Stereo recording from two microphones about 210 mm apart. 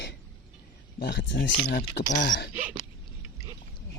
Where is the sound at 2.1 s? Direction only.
40° left (ahead or behind).